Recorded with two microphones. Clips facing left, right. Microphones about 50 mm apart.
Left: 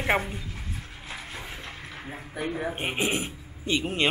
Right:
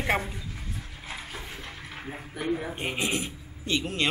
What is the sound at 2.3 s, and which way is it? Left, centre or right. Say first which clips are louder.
Speech: even; centre.